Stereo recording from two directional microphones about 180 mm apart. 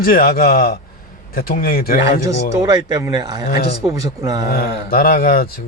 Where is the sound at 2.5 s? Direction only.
20° right (ahead or behind).